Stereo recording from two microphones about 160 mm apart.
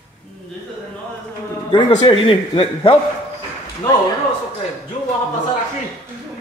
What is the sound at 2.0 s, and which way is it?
A man's voice, 35° left (ahead or behind).